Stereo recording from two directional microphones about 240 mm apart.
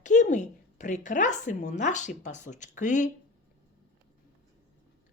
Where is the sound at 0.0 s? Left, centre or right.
Left.